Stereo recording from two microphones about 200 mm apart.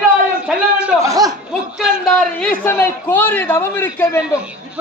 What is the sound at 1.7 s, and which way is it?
A man's voice, centre (ahead or behind).